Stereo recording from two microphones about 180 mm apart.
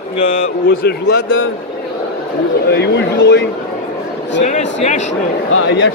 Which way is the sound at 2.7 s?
65° left (ahead or behind).